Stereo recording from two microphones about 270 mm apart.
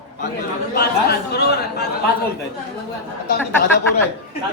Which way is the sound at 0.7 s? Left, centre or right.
Left.